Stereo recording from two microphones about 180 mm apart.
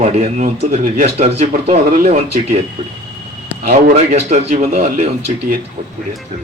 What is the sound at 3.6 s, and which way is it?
Speech, 55° right (ahead or behind).